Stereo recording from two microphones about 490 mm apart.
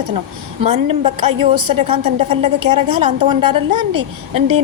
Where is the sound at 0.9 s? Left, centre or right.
Right.